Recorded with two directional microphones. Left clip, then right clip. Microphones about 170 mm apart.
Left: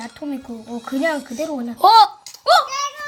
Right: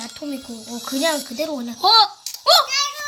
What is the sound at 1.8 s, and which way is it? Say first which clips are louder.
Speech: left 4 dB; 45° left (ahead or behind).